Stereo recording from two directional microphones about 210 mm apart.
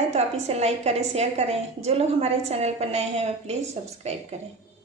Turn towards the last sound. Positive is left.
turn(degrees=-30)  # may be behind; listen again after turning